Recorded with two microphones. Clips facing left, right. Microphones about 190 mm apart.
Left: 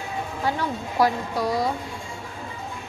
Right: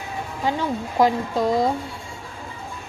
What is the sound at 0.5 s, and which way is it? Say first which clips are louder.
A woman's voice: right 4 dB; 20° right (ahead or behind).